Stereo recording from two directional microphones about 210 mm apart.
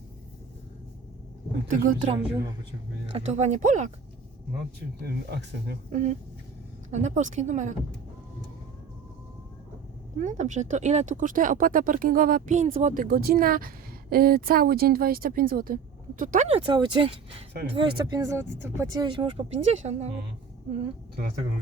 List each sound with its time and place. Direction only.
1.6 s speech: 40° right (ahead or behind)
5.0 s speech: 50° right (ahead or behind)
5.9 s speech: 35° right (ahead or behind)
10.2 s speech: 35° right (ahead or behind)
16.5 s speech: 20° right (ahead or behind)
17.5 s speech: 55° right (ahead or behind)
17.7 s speech: 20° right (ahead or behind)